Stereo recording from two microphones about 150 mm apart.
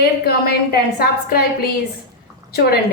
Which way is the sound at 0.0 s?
90° left.